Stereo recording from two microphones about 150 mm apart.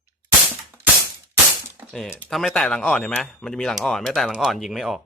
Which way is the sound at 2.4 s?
5° left (ahead or behind).